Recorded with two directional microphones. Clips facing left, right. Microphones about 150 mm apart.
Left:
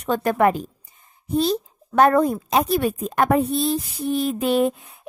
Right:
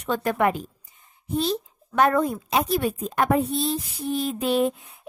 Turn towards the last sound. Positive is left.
turn(degrees=55)  # may be behind; listen again after turning